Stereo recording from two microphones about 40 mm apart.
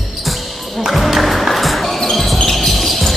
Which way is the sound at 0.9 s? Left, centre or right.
Centre.